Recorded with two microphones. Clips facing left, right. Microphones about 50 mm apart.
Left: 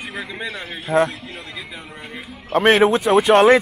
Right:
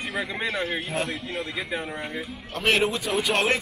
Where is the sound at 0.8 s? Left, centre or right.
Left.